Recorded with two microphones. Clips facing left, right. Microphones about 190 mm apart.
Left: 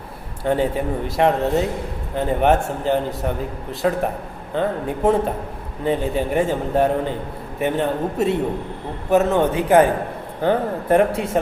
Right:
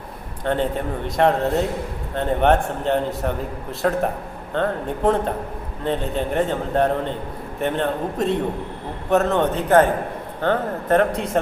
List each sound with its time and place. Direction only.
0.4 s a man's voice: 5° left (ahead or behind)